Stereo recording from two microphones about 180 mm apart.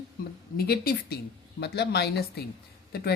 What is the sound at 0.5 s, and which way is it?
Speech, 60° left (ahead or behind).